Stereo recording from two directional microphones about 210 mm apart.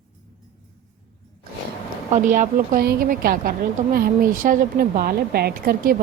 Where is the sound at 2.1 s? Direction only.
40° right (ahead or behind).